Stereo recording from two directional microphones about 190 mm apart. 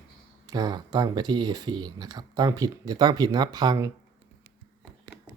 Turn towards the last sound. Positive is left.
turn(degrees=-20)  # may be behind; listen again after turning